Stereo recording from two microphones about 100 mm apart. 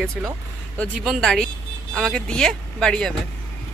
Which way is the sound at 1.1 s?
5° left (ahead or behind).